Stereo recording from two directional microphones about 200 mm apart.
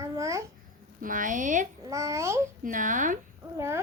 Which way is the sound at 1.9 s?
15° right (ahead or behind).